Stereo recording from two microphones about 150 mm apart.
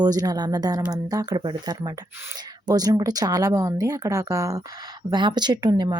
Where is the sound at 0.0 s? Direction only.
25° right (ahead or behind).